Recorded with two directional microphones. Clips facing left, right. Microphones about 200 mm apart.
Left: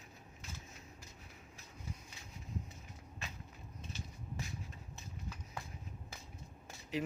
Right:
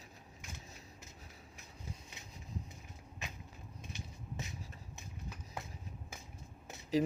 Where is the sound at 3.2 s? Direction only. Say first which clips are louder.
Right 2 dB; 15° right (ahead or behind).